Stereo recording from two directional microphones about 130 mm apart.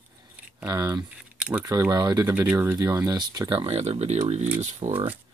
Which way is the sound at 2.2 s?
15° right (ahead or behind).